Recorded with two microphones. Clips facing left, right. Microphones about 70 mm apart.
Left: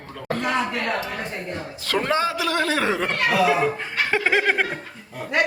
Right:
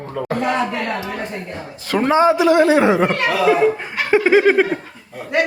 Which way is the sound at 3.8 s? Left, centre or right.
Centre.